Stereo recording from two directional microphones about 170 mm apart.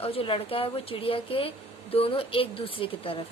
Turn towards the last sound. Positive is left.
turn(degrees=30)  # may be behind; listen again after turning